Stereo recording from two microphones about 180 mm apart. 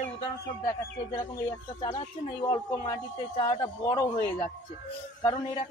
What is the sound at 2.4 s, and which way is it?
Speech, 25° left (ahead or behind).